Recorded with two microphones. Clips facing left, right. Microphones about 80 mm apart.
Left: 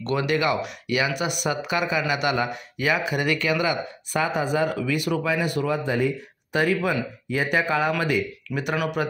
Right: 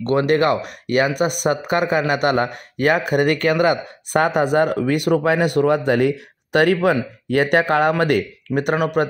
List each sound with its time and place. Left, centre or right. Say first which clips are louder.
0.0 s speech: right 7 dB; right